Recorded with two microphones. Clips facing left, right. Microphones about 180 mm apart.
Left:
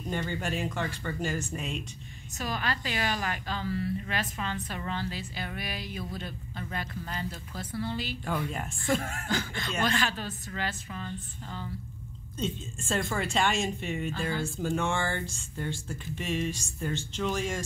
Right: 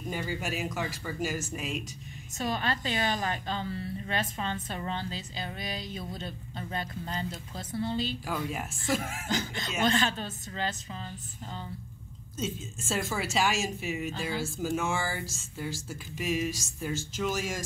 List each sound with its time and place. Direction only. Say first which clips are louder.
0.1 s speech: left 2 dB; 5° right (ahead or behind)
2.3 s a woman's voice: right 2 dB; 25° right (ahead or behind)
8.5 s speech: left 1 dB; 5° right (ahead or behind)
9.3 s a woman's voice: even; 20° right (ahead or behind)
12.4 s speech: left 1 dB; 5° right (ahead or behind)